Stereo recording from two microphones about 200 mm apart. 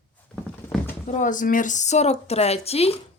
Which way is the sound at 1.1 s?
40° left (ahead or behind).